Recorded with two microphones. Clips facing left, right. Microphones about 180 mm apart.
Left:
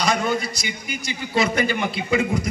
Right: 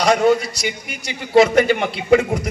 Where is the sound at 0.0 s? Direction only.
75° right (ahead or behind).